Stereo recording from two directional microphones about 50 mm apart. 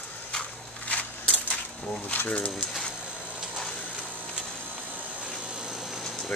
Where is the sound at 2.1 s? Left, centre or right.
Left.